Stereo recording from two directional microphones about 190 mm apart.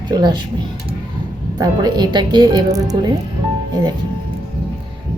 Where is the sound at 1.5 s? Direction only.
20° right (ahead or behind).